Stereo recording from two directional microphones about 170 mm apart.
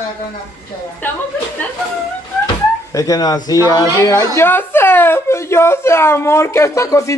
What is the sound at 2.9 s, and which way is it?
Speech, 20° left (ahead or behind).